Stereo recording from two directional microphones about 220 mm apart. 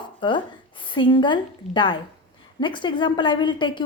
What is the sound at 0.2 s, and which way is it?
A woman's voice, 20° left (ahead or behind).